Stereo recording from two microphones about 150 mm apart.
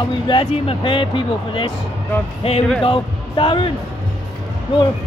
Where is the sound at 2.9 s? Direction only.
35° left (ahead or behind).